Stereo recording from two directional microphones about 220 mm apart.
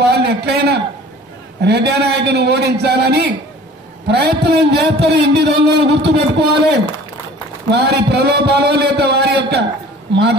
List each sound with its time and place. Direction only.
0.0 s a man's voice: 50° right (ahead or behind)